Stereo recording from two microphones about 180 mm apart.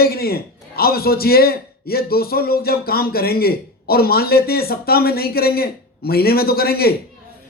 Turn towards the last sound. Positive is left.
turn(degrees=60)  # may be behind; listen again after turning